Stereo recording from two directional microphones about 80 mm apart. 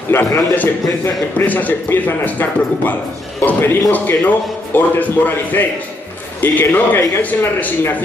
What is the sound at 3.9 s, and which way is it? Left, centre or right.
Speech, left.